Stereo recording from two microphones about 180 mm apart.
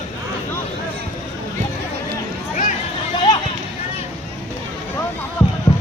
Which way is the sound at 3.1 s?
20° left (ahead or behind).